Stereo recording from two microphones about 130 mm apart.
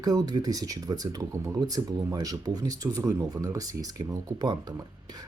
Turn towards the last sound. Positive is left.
turn(degrees=-30)  # may be behind; listen again after turning